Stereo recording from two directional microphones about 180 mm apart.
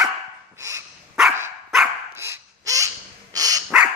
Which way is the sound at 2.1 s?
15° right (ahead or behind).